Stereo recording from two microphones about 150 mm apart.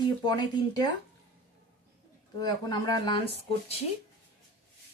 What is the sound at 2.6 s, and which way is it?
Speech, 25° left (ahead or behind).